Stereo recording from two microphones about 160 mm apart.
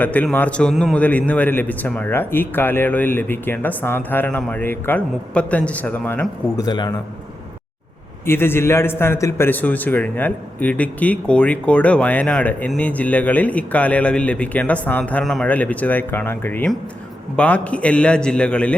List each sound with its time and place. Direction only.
0.0 s a man's voice: 10° left (ahead or behind)
6.6 s a man's voice: 25° left (ahead or behind)
8.3 s a man's voice: 15° left (ahead or behind)